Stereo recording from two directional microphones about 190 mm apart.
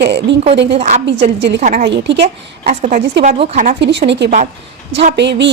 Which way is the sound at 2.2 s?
35° right (ahead or behind).